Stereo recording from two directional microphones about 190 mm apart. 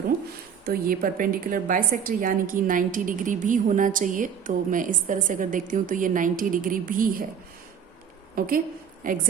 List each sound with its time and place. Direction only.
0.6 s a woman's voice: 50° right (ahead or behind)
8.4 s a woman's voice: 50° right (ahead or behind)